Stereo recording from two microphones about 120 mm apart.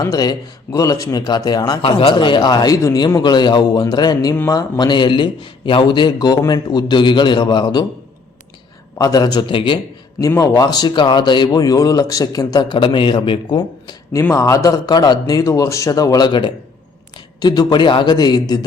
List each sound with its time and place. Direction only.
0.0 s speech: 30° left (ahead or behind)
1.8 s speech: 50° left (ahead or behind)
9.0 s speech: 30° left (ahead or behind)
10.2 s speech: 30° left (ahead or behind); by 13.6 s 45° left (ahead or behind)
14.1 s a man's voice: 25° left (ahead or behind)